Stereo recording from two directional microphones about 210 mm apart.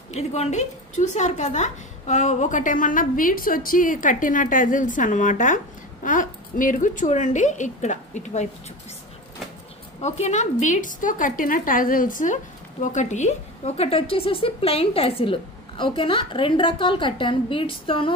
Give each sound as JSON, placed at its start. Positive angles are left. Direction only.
{"t": 0.1, "sound": "a woman's voice", "side_deg": 35}
{"t": 10.2, "sound": "a woman's voice", "side_deg": 35}